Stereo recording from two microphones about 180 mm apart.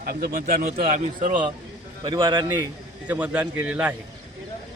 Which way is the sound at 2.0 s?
25° right (ahead or behind).